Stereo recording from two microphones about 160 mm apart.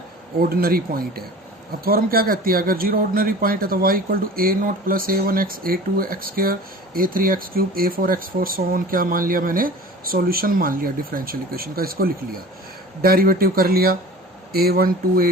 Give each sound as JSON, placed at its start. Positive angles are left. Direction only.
{"t": 0.3, "sound": "speech", "side_deg": -70}